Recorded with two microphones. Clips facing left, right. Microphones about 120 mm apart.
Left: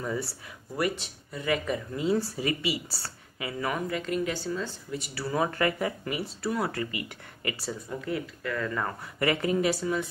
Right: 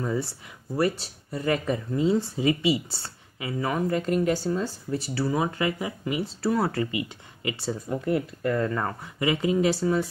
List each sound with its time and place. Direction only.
0.0 s speech: 25° right (ahead or behind)
3.9 s speech: 40° right (ahead or behind); by 8.0 s 25° right (ahead or behind)
8.0 s speech: 45° right (ahead or behind)
8.6 s speech: 25° right (ahead or behind)